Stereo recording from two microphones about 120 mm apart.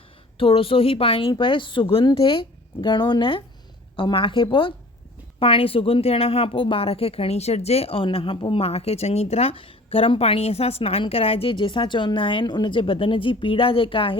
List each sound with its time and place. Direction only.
0.3 s speech: 50° left (ahead or behind)